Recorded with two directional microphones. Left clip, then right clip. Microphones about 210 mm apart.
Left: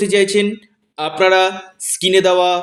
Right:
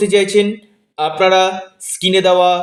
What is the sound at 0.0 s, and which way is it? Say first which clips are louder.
Speech: right 2 dB; 35° left (ahead or behind).